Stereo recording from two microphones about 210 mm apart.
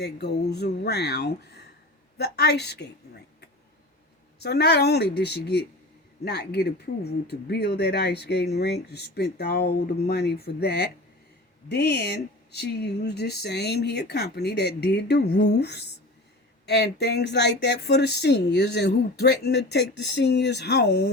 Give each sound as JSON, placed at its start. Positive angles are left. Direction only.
{"t": 0.0, "sound": "speech", "side_deg": 50}
{"t": 4.4, "sound": "speech", "side_deg": 50}